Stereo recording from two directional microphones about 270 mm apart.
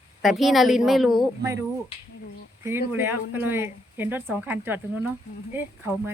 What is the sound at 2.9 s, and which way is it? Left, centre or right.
A woman's voice, centre.